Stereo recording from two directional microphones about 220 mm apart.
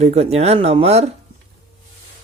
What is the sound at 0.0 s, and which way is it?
Speech, 30° right (ahead or behind).